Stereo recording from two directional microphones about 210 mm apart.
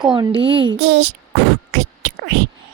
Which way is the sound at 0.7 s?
55° right (ahead or behind).